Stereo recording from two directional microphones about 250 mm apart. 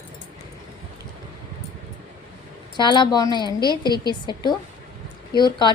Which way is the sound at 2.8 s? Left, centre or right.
Centre.